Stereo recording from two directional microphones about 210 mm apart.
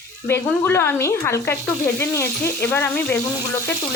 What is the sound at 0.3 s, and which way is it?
A woman's voice, 10° left (ahead or behind).